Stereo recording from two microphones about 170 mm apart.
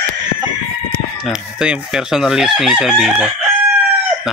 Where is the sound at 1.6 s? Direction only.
5° right (ahead or behind).